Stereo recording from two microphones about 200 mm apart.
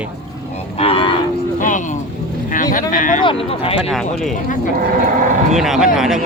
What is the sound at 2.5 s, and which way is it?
Speech, 40° left (ahead or behind).